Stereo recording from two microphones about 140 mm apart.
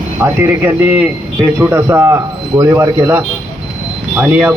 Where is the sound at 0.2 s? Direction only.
15° right (ahead or behind).